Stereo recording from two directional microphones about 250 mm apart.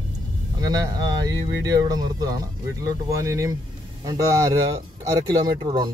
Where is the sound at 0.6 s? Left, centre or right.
Centre.